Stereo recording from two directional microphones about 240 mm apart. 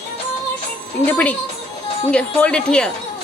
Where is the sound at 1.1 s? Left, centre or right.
Centre.